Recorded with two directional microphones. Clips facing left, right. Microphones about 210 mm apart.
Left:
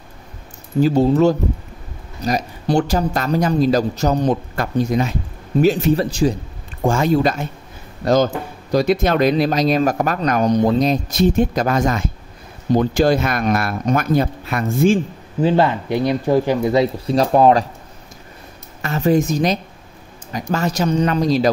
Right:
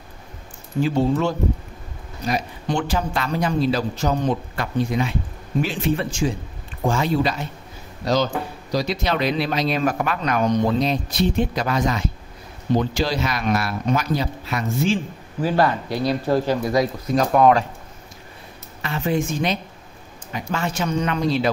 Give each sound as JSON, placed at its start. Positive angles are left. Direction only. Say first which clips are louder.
{"t": 0.7, "sound": "a man's voice", "louder": "left 6 dB", "side_deg": 40}
{"t": 15.4, "sound": "speech", "louder": "left 4 dB", "side_deg": 20}
{"t": 18.8, "sound": "a man's voice", "louder": "left 6 dB", "side_deg": 40}